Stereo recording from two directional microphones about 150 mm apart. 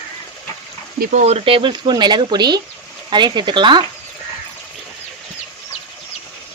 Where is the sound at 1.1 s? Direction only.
45° right (ahead or behind).